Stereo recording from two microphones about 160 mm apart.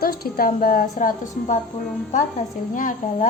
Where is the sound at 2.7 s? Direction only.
55° left (ahead or behind).